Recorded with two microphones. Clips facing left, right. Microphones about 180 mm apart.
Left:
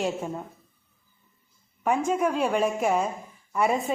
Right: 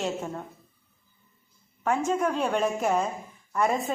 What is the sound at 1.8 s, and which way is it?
A woman's voice, 10° left (ahead or behind).